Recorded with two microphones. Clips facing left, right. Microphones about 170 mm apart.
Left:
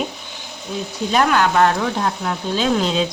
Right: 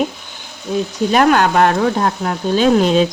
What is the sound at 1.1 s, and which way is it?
Speech, 45° right (ahead or behind).